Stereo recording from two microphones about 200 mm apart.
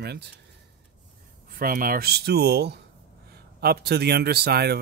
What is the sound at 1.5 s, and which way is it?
Speech, 45° right (ahead or behind).